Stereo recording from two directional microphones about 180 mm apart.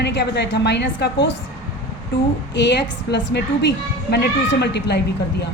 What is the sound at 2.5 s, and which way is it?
A woman's voice, 75° left (ahead or behind).